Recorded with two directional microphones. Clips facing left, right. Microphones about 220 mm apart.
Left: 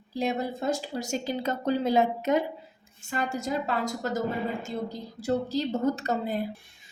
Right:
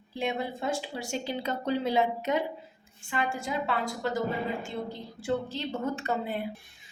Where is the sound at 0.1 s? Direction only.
40° left (ahead or behind).